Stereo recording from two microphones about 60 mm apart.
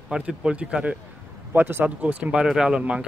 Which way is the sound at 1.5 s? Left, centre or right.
Right.